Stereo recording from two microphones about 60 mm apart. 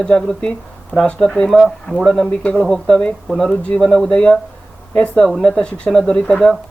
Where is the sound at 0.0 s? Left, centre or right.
Centre.